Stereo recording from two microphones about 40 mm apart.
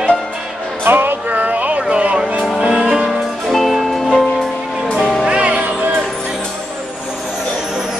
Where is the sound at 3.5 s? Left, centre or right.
Centre.